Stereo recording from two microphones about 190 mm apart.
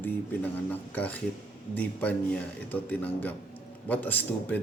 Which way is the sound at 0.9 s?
10° left (ahead or behind).